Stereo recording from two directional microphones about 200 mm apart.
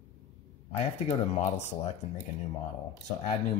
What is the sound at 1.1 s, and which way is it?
Speech, 35° left (ahead or behind).